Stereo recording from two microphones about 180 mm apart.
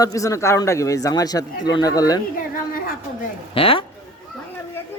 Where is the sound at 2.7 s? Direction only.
50° left (ahead or behind).